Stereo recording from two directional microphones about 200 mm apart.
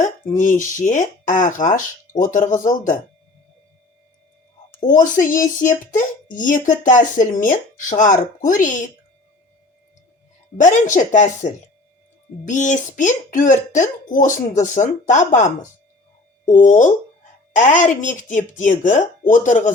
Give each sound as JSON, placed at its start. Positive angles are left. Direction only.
{"t": 0.3, "sound": "speech", "side_deg": 40}
{"t": 5.1, "sound": "speech", "side_deg": 15}
{"t": 5.5, "sound": "speech", "side_deg": 40}
{"t": 10.6, "sound": "speech", "side_deg": 40}